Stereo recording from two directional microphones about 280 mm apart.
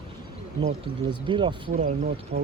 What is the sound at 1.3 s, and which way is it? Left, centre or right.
Speech, centre.